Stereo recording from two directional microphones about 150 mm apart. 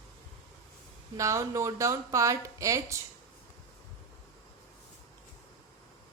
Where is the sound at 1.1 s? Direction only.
20° right (ahead or behind).